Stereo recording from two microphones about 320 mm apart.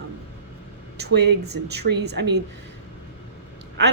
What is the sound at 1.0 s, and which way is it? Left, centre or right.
Speech, right.